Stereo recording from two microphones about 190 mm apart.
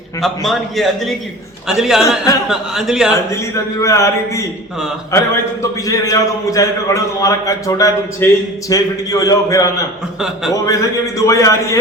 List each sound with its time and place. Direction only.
0.2 s a man's voice: centre (ahead or behind)
3.2 s a man's voice: 15° left (ahead or behind)
10.2 s a man's voice: 5° right (ahead or behind)
10.5 s a man's voice: 15° left (ahead or behind)